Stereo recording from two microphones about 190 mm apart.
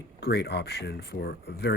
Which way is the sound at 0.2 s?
60° left (ahead or behind).